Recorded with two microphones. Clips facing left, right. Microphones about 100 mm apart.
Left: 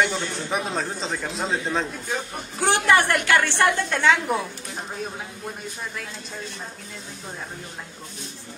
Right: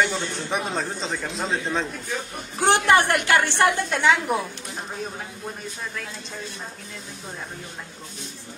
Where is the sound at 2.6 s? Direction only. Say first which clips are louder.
Right 1 dB; 25° right (ahead or behind).